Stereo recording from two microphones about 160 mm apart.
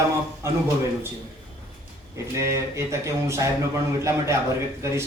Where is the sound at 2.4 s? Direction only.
20° right (ahead or behind).